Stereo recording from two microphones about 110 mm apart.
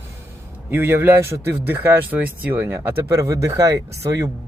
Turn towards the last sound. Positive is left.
turn(degrees=-30)  # may be behind; listen again after turning